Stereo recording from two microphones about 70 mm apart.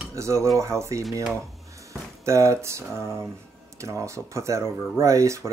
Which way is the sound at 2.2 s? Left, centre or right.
Right.